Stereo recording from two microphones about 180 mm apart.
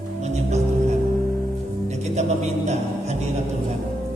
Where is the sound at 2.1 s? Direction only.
40° right (ahead or behind).